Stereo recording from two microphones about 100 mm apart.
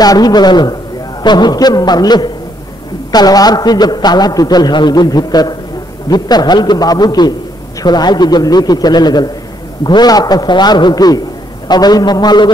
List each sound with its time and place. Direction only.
0.0 s a man's voice: 40° left (ahead or behind)